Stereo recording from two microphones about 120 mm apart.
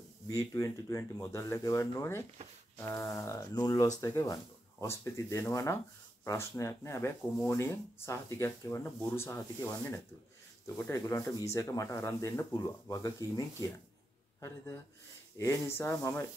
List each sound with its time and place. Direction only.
0.3 s speech: 25° left (ahead or behind)
15.3 s speech: 25° left (ahead or behind)